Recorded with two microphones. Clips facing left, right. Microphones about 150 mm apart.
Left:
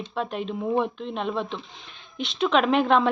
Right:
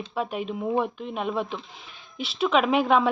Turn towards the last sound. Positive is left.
turn(degrees=-5)  # may be behind; listen again after turning